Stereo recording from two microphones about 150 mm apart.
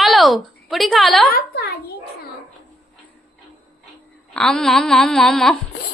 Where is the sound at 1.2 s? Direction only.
90° left.